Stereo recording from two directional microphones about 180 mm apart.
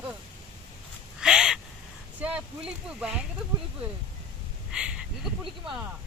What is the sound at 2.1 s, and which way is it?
Speech, 5° right (ahead or behind).